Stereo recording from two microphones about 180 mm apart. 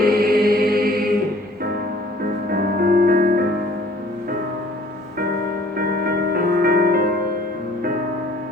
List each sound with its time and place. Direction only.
0.0 s chant: 55° right (ahead or behind)
2.5 s music: 55° right (ahead or behind)
5.7 s music: 55° right (ahead or behind)